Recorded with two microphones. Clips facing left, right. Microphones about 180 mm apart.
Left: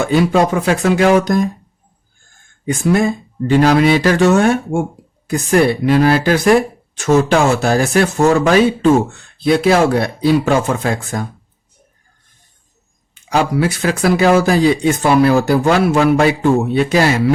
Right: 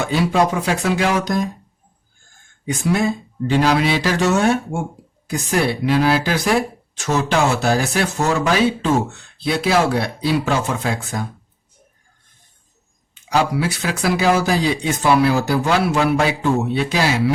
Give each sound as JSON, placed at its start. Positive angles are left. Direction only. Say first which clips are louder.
{"t": 0.0, "sound": "speech", "louder": "left 4 dB", "side_deg": 55}
{"t": 2.6, "sound": "speech", "louder": "left 4 dB", "side_deg": 50}
{"t": 13.3, "sound": "speech", "louder": "left 3 dB", "side_deg": 50}